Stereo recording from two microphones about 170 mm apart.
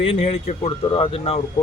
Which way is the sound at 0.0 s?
35° left (ahead or behind).